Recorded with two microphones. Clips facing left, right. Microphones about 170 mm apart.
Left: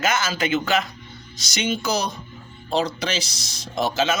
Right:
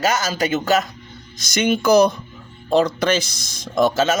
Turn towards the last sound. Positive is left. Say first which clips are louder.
# right 5 dB
turn(degrees=-45)  # may be behind; listen again after turning